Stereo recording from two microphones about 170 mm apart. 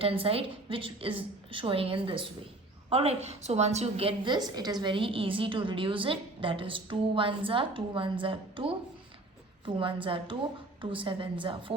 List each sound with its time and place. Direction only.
0.0 s a woman's voice: 35° right (ahead or behind)